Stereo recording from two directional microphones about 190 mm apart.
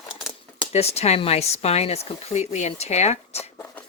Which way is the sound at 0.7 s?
35° left (ahead or behind).